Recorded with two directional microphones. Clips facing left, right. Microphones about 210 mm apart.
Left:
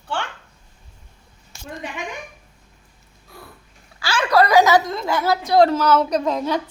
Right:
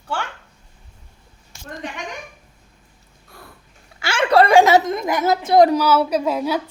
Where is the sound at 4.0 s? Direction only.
25° right (ahead or behind); by 6.6 s 10° right (ahead or behind).